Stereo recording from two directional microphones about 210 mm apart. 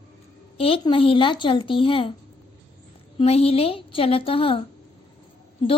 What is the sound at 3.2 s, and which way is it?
A woman's voice, 30° left (ahead or behind).